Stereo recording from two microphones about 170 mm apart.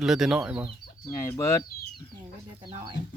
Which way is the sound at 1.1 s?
15° left (ahead or behind).